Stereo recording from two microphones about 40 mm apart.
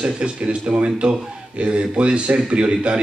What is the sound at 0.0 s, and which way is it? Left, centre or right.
A man's voice, right.